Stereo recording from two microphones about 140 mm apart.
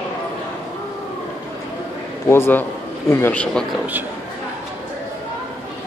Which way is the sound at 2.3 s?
15° left (ahead or behind).